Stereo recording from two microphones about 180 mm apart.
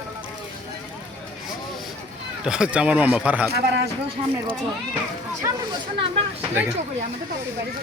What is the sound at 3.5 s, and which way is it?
Speech, 65° right (ahead or behind).